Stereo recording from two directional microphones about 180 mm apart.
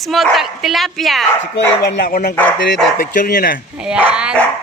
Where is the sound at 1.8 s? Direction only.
70° left (ahead or behind).